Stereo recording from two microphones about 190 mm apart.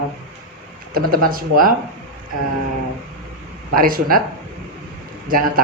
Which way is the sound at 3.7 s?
50° right (ahead or behind).